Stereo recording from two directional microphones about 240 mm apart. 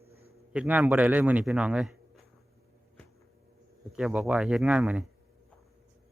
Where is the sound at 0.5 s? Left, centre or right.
Centre.